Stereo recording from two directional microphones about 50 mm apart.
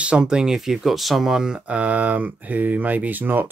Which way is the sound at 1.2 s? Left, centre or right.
Centre.